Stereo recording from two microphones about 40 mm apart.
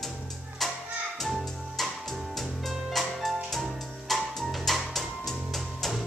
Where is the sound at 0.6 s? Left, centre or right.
Centre.